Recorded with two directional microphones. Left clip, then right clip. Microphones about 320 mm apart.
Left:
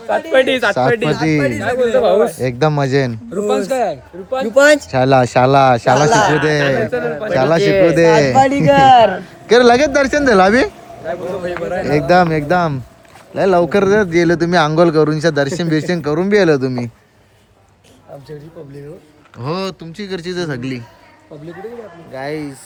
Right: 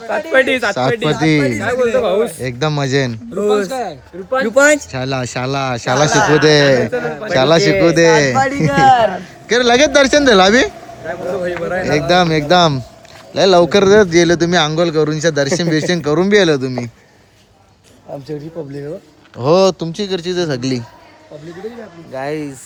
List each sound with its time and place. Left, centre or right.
0.1 s a man's voice: centre
3.7 s a man's voice: centre
4.4 s a man's voice: centre
4.9 s a man's voice: centre
19.4 s a man's voice: centre
22.1 s a man's voice: centre